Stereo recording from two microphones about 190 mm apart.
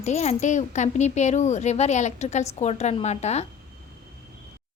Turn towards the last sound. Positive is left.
turn(degrees=35)  # may be behind; listen again after turning